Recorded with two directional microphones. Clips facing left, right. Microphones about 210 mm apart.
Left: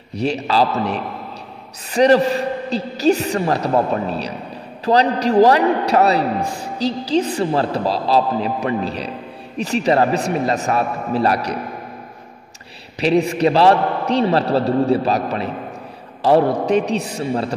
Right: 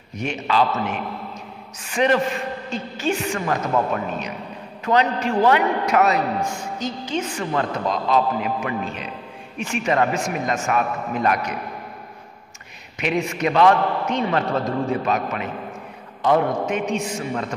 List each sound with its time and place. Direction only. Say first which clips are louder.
0.1 s a man's voice: left 4 dB; 35° left (ahead or behind)
12.9 s a man's voice: left 7 dB; 35° left (ahead or behind)